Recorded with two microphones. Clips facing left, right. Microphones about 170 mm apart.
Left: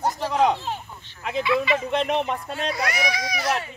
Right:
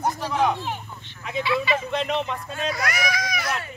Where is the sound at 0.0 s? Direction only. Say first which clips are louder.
Left 2 dB; 35° left (ahead or behind).